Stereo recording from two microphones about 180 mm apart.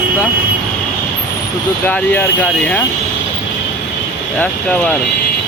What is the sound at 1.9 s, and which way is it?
Speech, 10° left (ahead or behind).